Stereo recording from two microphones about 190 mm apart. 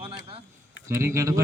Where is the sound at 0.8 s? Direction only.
15° right (ahead or behind).